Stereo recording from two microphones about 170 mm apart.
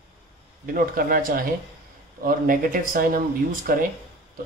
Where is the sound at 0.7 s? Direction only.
60° right (ahead or behind).